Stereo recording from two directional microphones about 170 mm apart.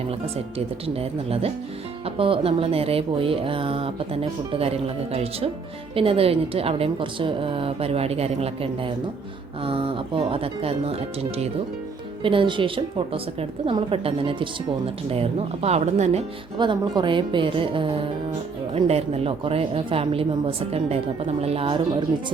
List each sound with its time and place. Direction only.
0.9 s speech: 35° right (ahead or behind)
12.2 s speech: 30° right (ahead or behind)
16.6 s speech: 25° right (ahead or behind)